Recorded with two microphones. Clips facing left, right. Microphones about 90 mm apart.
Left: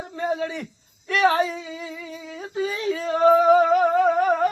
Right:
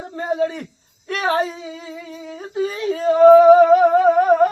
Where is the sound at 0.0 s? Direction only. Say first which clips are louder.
Right 4 dB; 35° right (ahead or behind).